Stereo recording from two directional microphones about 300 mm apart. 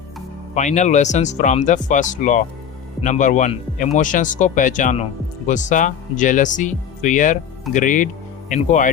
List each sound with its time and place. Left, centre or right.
0.5 s speech: left